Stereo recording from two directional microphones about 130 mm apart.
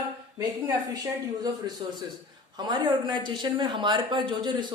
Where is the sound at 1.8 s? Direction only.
40° right (ahead or behind).